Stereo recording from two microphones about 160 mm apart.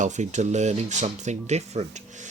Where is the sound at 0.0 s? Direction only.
50° right (ahead or behind).